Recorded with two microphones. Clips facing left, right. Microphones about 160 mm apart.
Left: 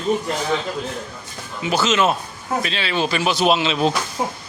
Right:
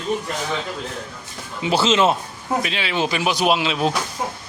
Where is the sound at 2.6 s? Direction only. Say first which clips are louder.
Left 1 dB; 15° right (ahead or behind).